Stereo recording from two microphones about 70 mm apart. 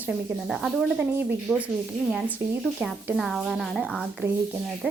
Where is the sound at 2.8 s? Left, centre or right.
Centre.